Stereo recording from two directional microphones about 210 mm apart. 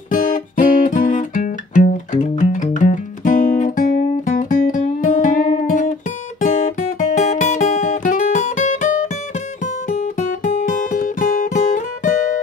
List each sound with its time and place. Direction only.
0.1 s guitar: 40° left (ahead or behind)
2.3 s music: 35° left (ahead or behind)
6.4 s guitar: 35° left (ahead or behind)